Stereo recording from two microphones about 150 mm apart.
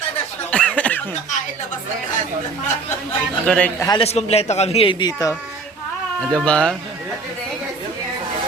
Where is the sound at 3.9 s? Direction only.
40° left (ahead or behind); by 5.3 s 25° left (ahead or behind).